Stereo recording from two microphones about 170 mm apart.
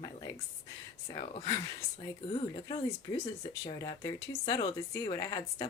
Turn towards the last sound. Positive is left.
turn(degrees=25)  # may be behind; listen again after turning